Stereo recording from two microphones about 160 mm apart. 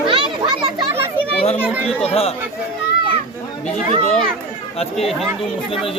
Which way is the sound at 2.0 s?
40° left (ahead or behind).